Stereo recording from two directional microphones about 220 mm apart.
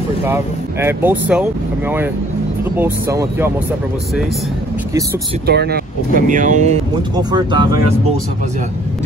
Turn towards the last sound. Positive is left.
turn(degrees=-20)  # may be behind; listen again after turning